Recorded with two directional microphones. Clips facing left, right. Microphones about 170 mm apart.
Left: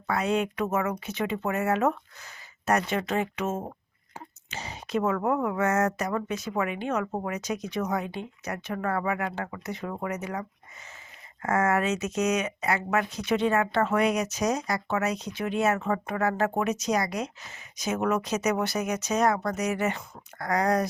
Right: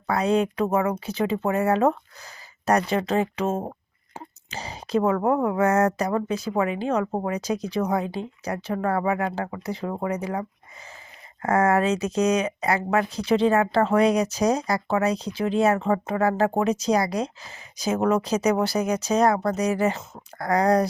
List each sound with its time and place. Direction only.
0.1 s speech: 35° right (ahead or behind)
11.4 s speech: 35° right (ahead or behind)